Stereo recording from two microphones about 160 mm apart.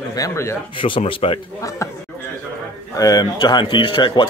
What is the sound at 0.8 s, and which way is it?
Speech, 30° left (ahead or behind).